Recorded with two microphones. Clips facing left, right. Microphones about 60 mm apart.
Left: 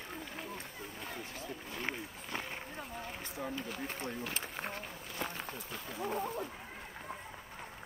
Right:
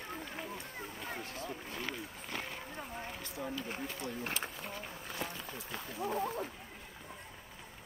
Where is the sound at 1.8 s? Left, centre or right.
Left.